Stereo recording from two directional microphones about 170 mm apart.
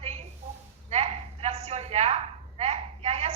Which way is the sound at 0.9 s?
40° right (ahead or behind).